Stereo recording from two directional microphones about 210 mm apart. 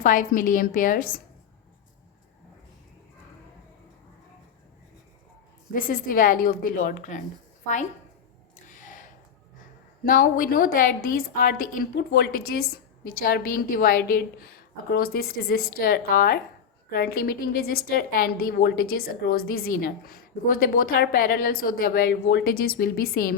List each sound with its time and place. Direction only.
0.0 s a woman's voice: 40° left (ahead or behind)
5.7 s a woman's voice: 40° left (ahead or behind)
8.6 s a sound: 40° left (ahead or behind)
10.0 s a woman's voice: 40° left (ahead or behind)